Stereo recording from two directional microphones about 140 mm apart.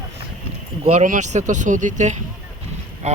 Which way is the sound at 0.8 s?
50° right (ahead or behind).